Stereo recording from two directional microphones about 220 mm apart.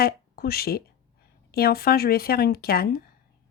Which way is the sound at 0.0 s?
45° left (ahead or behind).